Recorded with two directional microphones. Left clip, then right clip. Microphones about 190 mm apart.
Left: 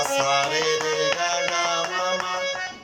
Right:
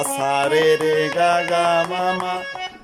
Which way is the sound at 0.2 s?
45° right (ahead or behind).